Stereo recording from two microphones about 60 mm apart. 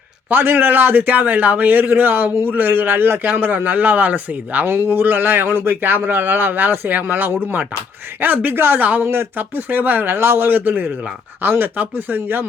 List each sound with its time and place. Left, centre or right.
0.3 s a man's voice: right
4.6 s a man's voice: right